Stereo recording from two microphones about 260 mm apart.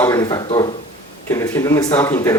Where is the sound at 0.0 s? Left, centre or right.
Centre.